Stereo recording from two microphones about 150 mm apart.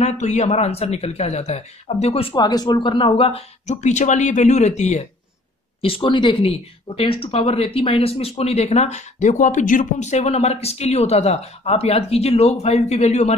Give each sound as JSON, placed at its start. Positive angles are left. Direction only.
{"t": 0.0, "sound": "speech", "side_deg": 50}
{"t": 2.3, "sound": "speech", "side_deg": 30}
{"t": 5.8, "sound": "speech", "side_deg": 35}